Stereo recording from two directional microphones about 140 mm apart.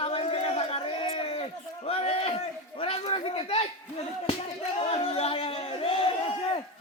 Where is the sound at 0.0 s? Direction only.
45° left (ahead or behind).